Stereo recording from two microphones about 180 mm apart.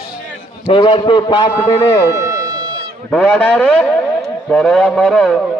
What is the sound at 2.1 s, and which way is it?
Music, 20° right (ahead or behind).